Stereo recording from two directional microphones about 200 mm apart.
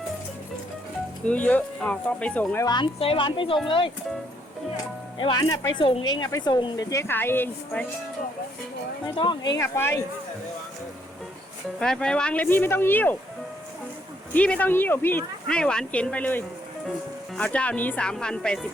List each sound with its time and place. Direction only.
1.3 s speech: 10° left (ahead or behind)
2.6 s speech: 25° left (ahead or behind)
5.1 s speech: 25° left (ahead or behind)
9.1 s speech: 25° left (ahead or behind)
9.6 s speech: 15° left (ahead or behind)
11.8 s speech: 5° left (ahead or behind)
14.3 s speech: 5° left (ahead or behind)